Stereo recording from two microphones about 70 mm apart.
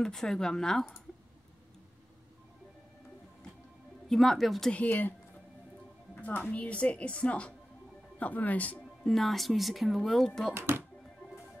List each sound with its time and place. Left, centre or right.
0.0 s speech: centre
4.1 s speech: centre
4.7 s a woman's voice: left
6.2 s a woman's voice: left
9.0 s speech: centre